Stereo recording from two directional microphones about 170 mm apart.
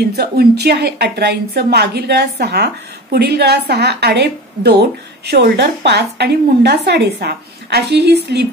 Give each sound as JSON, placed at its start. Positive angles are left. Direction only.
{"t": 0.1, "sound": "a woman's voice", "side_deg": -70}